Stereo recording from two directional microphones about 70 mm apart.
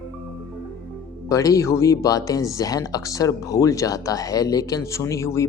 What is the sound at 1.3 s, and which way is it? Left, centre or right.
Speech, left.